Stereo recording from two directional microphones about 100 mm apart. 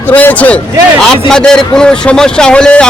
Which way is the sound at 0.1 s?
15° left (ahead or behind).